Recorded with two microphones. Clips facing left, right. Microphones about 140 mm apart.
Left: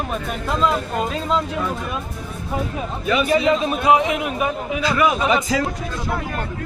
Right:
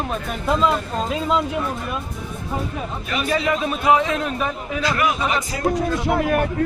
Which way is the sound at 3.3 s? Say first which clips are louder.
Left 1 dB; 20° left (ahead or behind).